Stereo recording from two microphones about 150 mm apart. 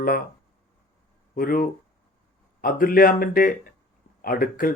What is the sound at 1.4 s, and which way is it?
Speech, 75° left (ahead or behind).